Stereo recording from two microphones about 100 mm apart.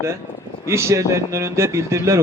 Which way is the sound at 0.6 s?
25° right (ahead or behind).